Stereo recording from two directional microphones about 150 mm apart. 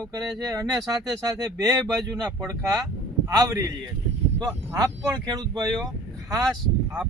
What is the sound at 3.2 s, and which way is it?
Speech, 20° right (ahead or behind).